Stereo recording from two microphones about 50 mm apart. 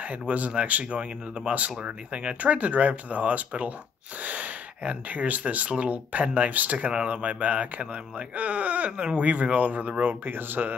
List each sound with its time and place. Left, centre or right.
0.0 s speech: right
6.9 s speech: right